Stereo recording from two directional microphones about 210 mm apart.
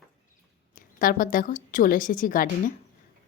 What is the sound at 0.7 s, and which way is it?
A woman's voice, 40° left (ahead or behind).